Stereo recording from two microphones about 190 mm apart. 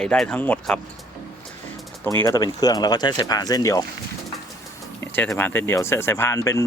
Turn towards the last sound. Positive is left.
turn(degrees=15)  # may be behind; listen again after turning